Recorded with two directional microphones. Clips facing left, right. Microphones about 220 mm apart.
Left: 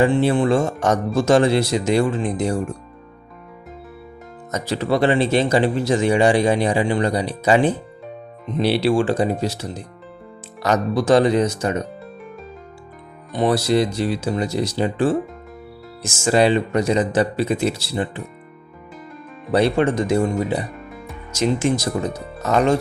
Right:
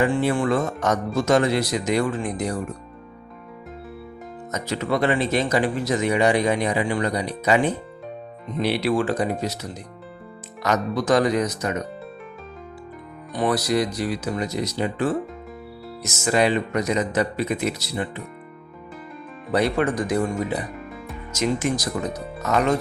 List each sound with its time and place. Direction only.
0.0 s speech: 30° left (ahead or behind)
4.5 s speech: 30° left (ahead or behind)
13.3 s speech: 25° left (ahead or behind)
19.5 s speech: 30° left (ahead or behind)